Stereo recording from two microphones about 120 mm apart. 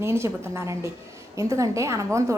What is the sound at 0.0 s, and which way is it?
A woman's voice, 20° right (ahead or behind).